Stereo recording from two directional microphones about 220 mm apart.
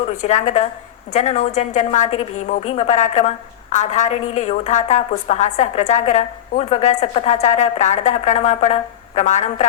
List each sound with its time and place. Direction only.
0.2 s a woman's voice: 35° left (ahead or behind)